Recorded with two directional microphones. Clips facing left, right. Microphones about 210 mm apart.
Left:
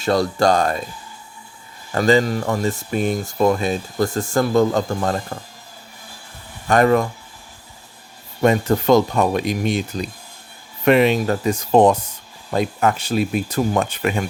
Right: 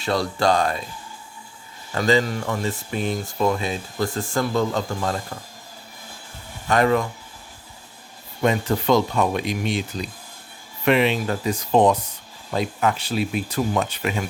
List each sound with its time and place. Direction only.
0.0 s speech: 45° left (ahead or behind)
1.9 s speech: 45° left (ahead or behind)
6.7 s speech: 45° left (ahead or behind)
8.4 s speech: 45° left (ahead or behind)